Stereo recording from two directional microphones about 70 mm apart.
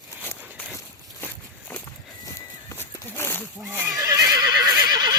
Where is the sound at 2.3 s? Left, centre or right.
Left.